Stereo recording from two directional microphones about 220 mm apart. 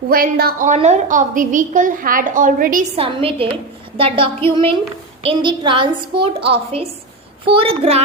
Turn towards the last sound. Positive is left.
turn(degrees=-25)  # may be behind; listen again after turning